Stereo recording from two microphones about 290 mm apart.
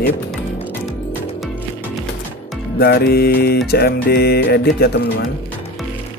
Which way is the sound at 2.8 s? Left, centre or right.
Left.